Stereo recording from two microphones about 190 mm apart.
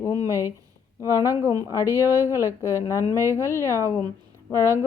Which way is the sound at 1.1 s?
15° left (ahead or behind).